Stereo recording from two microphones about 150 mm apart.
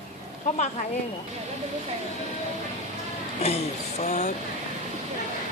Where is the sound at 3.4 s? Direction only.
45° left (ahead or behind).